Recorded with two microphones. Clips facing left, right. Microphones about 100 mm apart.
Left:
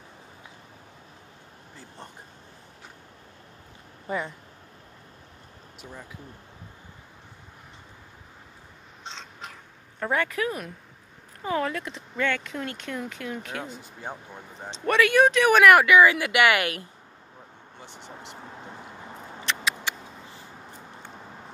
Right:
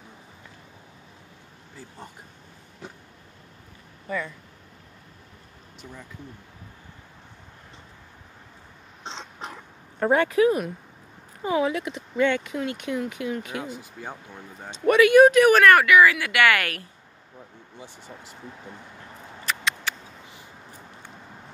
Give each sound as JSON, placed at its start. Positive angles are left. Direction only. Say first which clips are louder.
{"t": 9.0, "sound": "a sound", "louder": "right 4 dB", "side_deg": -30}
{"t": 9.9, "sound": "speech", "louder": "right 7 dB", "side_deg": -30}
{"t": 14.0, "sound": "speech", "louder": "left 4 dB", "side_deg": 15}
{"t": 14.7, "sound": "speech", "louder": "right 5 dB", "side_deg": -5}
{"t": 15.8, "sound": "speech", "louder": "even", "side_deg": 25}
{"t": 18.0, "sound": "speech", "louder": "left 2 dB", "side_deg": 70}
{"t": 19.4, "sound": "a sound", "louder": "right 1 dB", "side_deg": 5}